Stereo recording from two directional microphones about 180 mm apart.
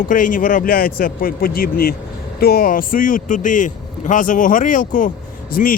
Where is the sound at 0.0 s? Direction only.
45° left (ahead or behind).